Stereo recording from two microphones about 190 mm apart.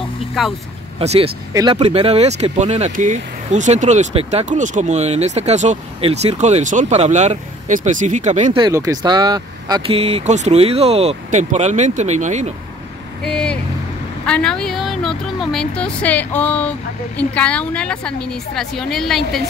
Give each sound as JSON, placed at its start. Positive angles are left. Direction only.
{"t": 0.4, "sound": "a woman's voice", "side_deg": 0}
{"t": 0.9, "sound": "speech", "side_deg": -30}
{"t": 1.5, "sound": "speech", "side_deg": -20}
{"t": 1.8, "sound": "speech", "side_deg": -35}
{"t": 8.5, "sound": "speech", "side_deg": -20}
{"t": 13.2, "sound": "a woman's voice", "side_deg": 5}